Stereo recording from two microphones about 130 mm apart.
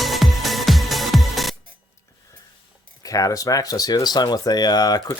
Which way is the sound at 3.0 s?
25° left (ahead or behind).